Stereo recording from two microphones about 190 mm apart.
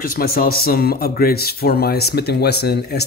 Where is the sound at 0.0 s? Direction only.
50° left (ahead or behind).